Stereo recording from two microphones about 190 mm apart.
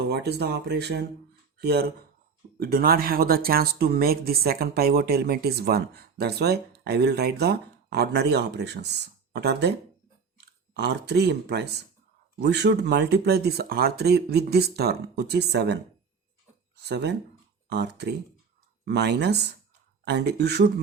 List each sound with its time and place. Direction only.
0.1 s speech: 60° right (ahead or behind)
10.8 s speech: 60° right (ahead or behind)